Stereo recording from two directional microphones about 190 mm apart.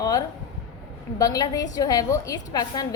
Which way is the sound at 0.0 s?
20° left (ahead or behind).